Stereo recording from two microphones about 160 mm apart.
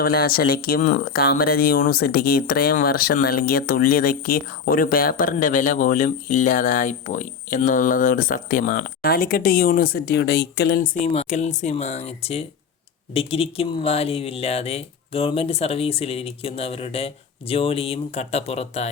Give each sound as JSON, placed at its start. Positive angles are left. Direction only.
{"t": 0.0, "sound": "speech", "side_deg": 70}
{"t": 11.0, "sound": "speech", "side_deg": 45}